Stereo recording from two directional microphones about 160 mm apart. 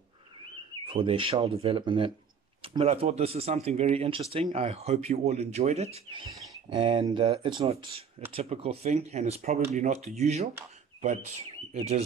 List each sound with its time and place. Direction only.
0.8 s speech: 35° right (ahead or behind)
11.7 s speech: 40° right (ahead or behind)